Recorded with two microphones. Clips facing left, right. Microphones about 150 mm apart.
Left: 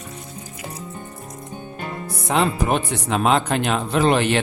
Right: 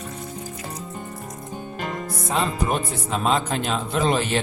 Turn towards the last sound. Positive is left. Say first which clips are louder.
# left 4 dB
turn(degrees=70)  # may be behind; listen again after turning